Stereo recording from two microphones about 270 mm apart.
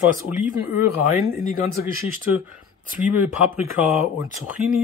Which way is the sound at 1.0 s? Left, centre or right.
Left.